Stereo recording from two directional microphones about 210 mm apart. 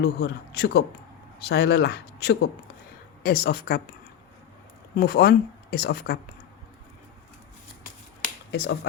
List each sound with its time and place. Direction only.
0.0 s speech: 50° left (ahead or behind)
4.9 s speech: 50° left (ahead or behind)
8.2 s finger snapping: 50° left (ahead or behind)